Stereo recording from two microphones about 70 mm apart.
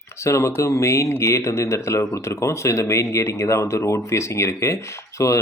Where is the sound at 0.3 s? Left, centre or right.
Left.